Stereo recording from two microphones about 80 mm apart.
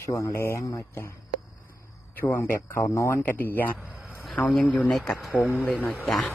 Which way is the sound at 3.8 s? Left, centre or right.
Right.